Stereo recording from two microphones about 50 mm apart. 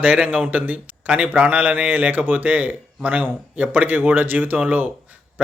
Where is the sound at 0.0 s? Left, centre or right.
Right.